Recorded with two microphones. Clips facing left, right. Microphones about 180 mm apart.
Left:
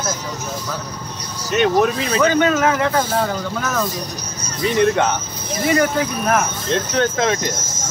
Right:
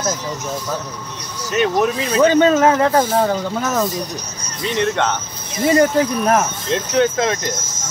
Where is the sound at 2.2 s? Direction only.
30° right (ahead or behind).